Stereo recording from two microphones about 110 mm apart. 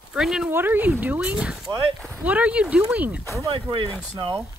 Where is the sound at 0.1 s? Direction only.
5° right (ahead or behind).